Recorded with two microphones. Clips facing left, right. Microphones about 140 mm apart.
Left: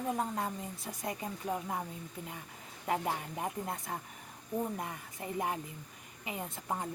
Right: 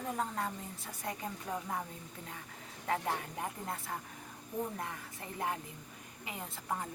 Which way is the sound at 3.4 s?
20° left (ahead or behind).